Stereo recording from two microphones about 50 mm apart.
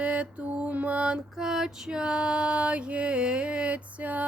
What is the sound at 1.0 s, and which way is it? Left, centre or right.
Music, centre.